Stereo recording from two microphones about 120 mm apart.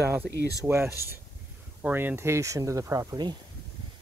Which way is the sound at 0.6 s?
20° right (ahead or behind).